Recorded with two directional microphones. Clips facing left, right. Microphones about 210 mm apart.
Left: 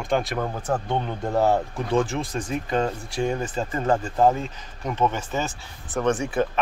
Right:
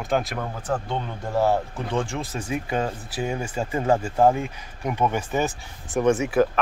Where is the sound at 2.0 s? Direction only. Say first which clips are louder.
Left 2 dB; 5° right (ahead or behind).